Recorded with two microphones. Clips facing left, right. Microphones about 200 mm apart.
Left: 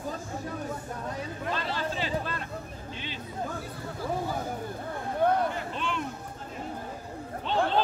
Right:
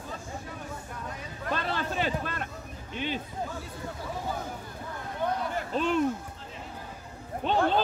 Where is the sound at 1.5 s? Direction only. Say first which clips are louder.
Right 4 dB; 55° right (ahead or behind).